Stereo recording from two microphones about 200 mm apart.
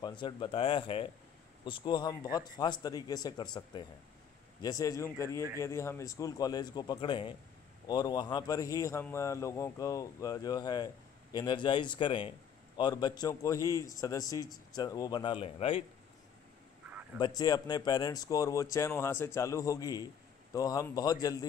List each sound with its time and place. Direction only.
0.0 s a man's voice: 25° left (ahead or behind)
17.2 s a man's voice: 20° left (ahead or behind)